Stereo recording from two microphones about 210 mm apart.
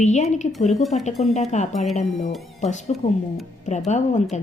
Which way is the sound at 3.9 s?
35° left (ahead or behind).